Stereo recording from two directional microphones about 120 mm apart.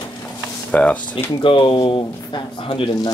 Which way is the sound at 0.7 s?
10° left (ahead or behind).